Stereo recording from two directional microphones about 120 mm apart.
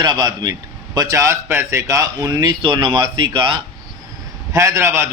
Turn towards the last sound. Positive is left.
turn(degrees=-20)  # may be behind; listen again after turning